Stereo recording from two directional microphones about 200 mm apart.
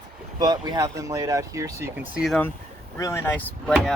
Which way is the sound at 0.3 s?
20° right (ahead or behind).